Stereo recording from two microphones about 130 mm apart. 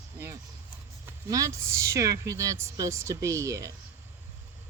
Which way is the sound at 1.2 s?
25° right (ahead or behind).